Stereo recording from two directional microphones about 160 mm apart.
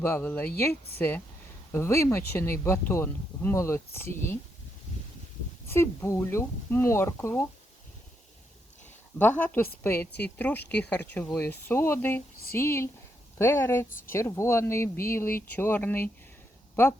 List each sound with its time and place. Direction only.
0.0 s speech: 15° left (ahead or behind)
5.6 s speech: 15° left (ahead or behind)
9.1 s speech: 10° left (ahead or behind)